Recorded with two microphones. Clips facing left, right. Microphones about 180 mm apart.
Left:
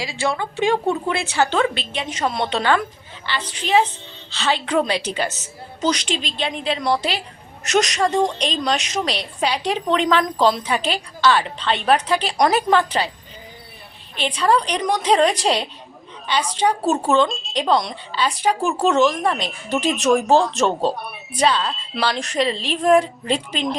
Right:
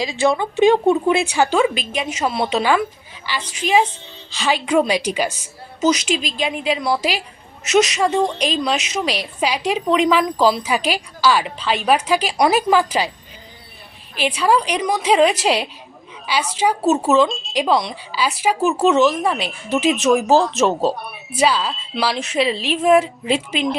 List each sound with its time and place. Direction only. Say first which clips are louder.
0.0 s a woman's voice: right 5 dB; 20° right (ahead or behind)
14.2 s a woman's voice: right 1 dB; 10° right (ahead or behind)